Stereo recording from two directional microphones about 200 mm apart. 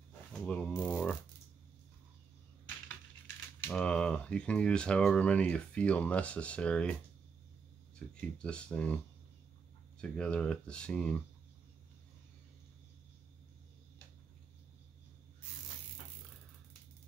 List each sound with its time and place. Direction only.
0.3 s mechanisms: 5° left (ahead or behind)
3.6 s speech: 5° left (ahead or behind)
8.1 s speech: 5° left (ahead or behind)